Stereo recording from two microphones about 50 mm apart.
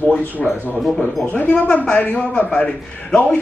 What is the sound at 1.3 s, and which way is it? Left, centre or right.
Speech, left.